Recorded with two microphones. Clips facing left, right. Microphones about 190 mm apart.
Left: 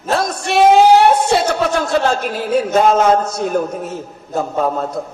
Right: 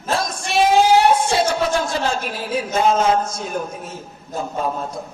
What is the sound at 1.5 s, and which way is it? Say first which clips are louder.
A man's voice: left 4 dB; 65° left (ahead or behind).